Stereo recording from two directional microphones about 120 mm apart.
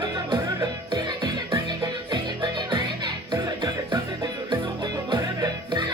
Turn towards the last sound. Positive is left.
turn(degrees=-35)  # may be behind; listen again after turning